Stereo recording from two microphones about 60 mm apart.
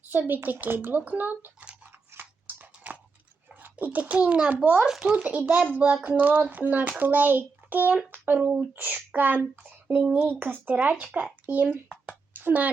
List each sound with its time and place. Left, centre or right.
0.1 s a child's voice: right
2.1 s biting: right
3.5 s a child's voice: right
4.9 s a child's voice: centre
5.1 s a child's voice: right
8.1 s a sound: right
8.4 s a child's voice: right
8.7 s a child's voice: right